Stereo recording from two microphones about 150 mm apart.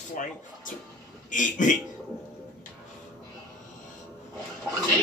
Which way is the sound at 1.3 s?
60° left (ahead or behind).